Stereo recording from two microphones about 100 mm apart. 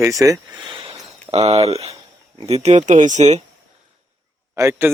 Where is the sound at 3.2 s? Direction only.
90° right.